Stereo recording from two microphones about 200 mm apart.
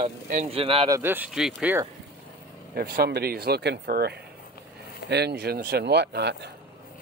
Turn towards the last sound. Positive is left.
turn(degrees=-55)  # may be behind; listen again after turning